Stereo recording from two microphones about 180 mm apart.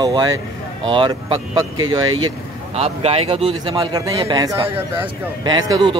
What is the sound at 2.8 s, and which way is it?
Speech, 35° right (ahead or behind).